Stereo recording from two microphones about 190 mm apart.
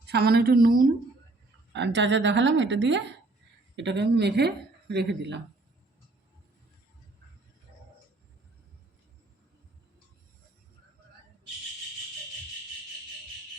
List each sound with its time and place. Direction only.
0.0 s speech: 60° right (ahead or behind)
1.7 s speech: 70° right (ahead or behind)